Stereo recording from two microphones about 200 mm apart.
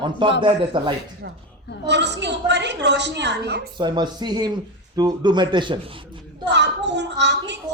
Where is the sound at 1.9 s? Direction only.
60° right (ahead or behind).